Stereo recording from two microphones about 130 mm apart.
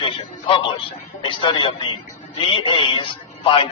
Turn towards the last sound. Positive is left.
turn(degrees=40)  # may be behind; listen again after turning